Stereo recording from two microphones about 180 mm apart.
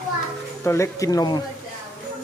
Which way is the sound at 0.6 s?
15° left (ahead or behind).